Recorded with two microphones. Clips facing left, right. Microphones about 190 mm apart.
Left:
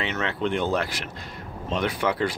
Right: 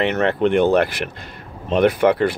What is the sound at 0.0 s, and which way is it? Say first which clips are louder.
Speech: right 9 dB; 60° right (ahead or behind).